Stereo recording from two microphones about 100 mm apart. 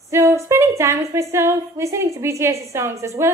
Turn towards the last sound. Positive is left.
turn(degrees=-30)  # may be behind; listen again after turning